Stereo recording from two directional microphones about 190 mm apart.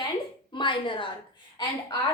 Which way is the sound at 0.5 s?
25° left (ahead or behind).